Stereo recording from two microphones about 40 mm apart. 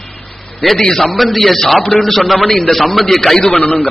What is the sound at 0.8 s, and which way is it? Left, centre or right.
A man's voice, centre.